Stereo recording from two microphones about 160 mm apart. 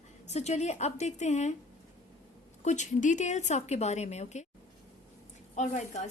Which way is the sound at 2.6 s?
45° left (ahead or behind).